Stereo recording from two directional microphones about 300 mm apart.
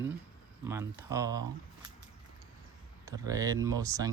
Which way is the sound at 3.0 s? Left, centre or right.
Centre.